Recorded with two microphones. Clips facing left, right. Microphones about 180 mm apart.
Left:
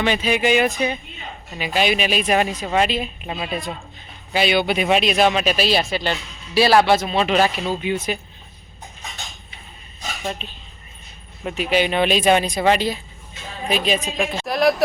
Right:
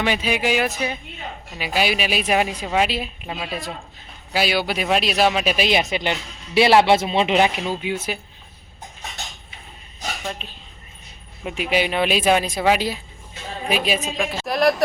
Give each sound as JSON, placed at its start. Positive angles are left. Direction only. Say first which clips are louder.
{"t": 0.0, "sound": "speech", "louder": "left 2 dB", "side_deg": -10}
{"t": 7.8, "sound": "speech", "louder": "left 3 dB", "side_deg": -10}
{"t": 10.4, "sound": "speech", "louder": "left 2 dB", "side_deg": 0}